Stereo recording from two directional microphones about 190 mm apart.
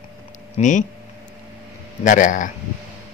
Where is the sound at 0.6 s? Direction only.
40° left (ahead or behind).